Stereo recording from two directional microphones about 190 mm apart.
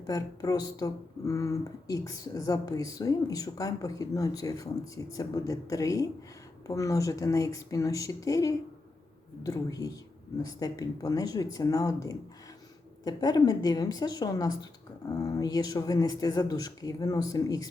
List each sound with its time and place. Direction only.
0.1 s speech: 20° left (ahead or behind)